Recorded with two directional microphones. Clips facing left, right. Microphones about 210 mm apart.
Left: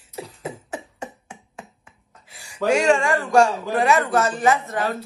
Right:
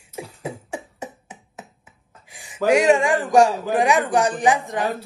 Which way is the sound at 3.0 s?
Centre (ahead or behind).